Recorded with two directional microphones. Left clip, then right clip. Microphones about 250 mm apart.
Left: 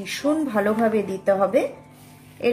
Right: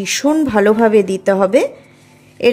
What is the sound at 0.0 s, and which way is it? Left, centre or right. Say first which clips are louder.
Speech: right 8 dB; right.